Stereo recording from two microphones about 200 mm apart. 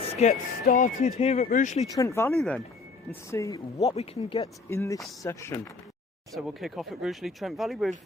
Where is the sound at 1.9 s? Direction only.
15° left (ahead or behind).